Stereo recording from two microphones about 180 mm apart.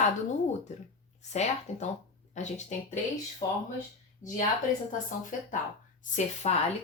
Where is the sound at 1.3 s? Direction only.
40° left (ahead or behind).